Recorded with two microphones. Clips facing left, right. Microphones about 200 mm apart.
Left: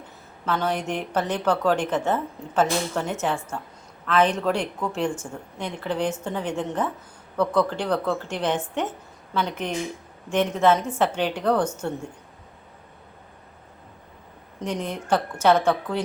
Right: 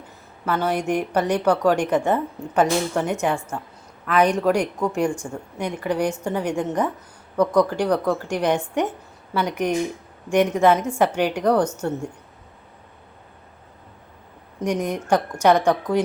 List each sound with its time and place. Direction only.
0.4 s a woman's voice: 10° right (ahead or behind)
14.6 s a woman's voice: 15° right (ahead or behind)